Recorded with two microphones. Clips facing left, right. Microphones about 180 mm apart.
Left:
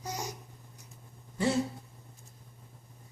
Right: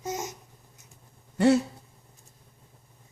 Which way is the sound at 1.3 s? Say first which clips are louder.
Right 9 dB; 65° right (ahead or behind).